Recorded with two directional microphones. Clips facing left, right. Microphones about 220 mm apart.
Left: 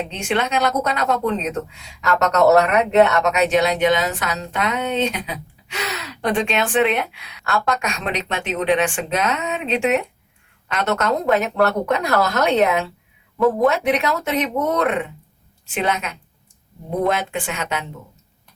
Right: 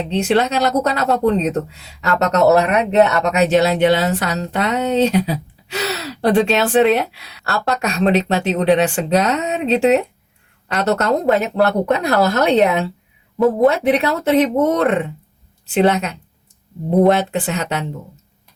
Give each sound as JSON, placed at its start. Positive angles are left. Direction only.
{"t": 0.1, "sound": "speech", "side_deg": -35}